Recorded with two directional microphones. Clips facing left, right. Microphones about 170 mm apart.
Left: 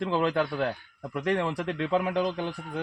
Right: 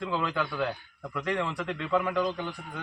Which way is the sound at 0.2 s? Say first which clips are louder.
Left 4 dB; 50° left (ahead or behind).